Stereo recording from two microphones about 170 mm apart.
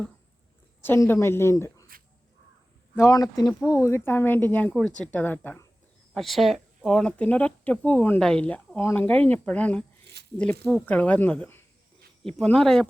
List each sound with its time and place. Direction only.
0.8 s a woman's voice: 15° left (ahead or behind)
2.9 s speech: 15° left (ahead or behind)
6.1 s speech: centre (ahead or behind)